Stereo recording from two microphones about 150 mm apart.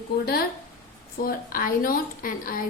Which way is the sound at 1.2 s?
75° left (ahead or behind).